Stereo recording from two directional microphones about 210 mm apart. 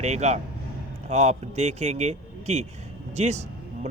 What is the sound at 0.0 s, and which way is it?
A man's voice, 35° right (ahead or behind).